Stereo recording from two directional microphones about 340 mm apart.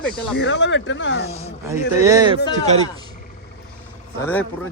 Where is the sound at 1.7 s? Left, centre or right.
Centre.